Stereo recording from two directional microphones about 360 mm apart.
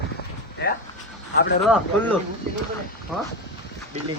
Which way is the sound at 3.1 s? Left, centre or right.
Centre.